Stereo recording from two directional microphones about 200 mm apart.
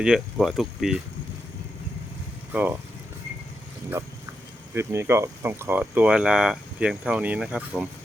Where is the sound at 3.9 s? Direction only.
15° right (ahead or behind).